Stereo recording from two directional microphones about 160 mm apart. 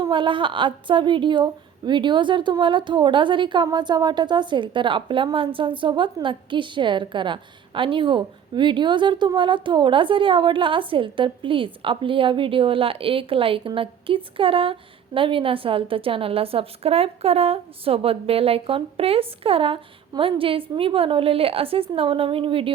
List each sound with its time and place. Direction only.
0.0 s a woman's voice: 30° right (ahead or behind)